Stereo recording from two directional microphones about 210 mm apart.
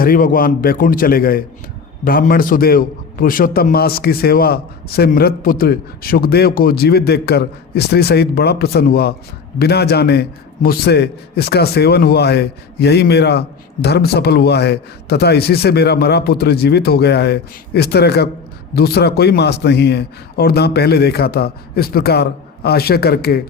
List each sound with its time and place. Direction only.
0.0 s a man's voice: 40° left (ahead or behind)